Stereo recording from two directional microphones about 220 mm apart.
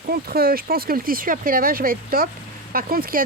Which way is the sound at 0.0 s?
45° right (ahead or behind).